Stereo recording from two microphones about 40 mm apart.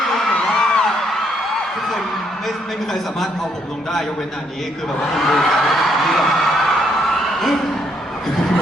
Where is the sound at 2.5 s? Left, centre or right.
Centre.